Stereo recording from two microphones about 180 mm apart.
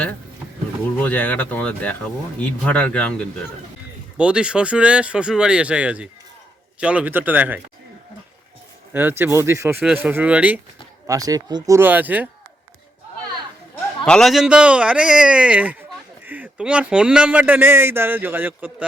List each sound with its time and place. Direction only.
1.0 s speech: 10° left (ahead or behind)
4.2 s speech: 5° right (ahead or behind)
8.9 s speech: 10° right (ahead or behind)
11.0 s speech: 20° right (ahead or behind)
14.0 s speech: 5° left (ahead or behind)